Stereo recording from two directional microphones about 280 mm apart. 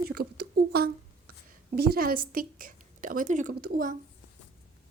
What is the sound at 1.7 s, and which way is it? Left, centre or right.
A woman's voice, right.